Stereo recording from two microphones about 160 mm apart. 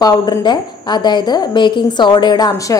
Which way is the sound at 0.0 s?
25° left (ahead or behind).